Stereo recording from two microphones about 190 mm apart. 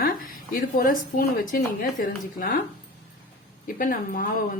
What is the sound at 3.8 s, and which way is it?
Speech, 45° left (ahead or behind).